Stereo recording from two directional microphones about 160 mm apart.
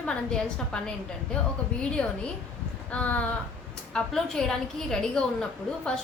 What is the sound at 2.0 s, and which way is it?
A woman's voice, 5° left (ahead or behind).